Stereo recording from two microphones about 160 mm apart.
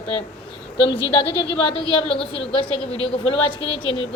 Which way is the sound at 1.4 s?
35° left (ahead or behind).